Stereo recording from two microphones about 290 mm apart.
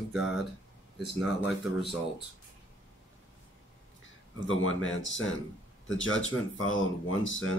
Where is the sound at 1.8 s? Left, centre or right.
Centre.